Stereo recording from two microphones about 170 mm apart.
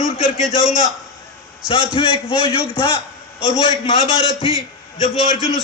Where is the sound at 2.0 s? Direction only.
30° left (ahead or behind).